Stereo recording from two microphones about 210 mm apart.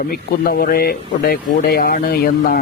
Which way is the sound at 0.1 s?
45° left (ahead or behind).